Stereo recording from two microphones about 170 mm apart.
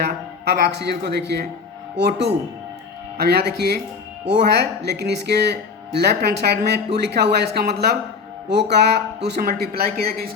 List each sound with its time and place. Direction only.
0.0 s speech: 75° right (ahead or behind)
3.2 s speech: 70° right (ahead or behind)